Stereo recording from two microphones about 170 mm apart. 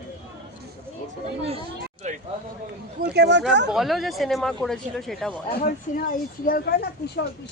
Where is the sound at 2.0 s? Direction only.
45° right (ahead or behind).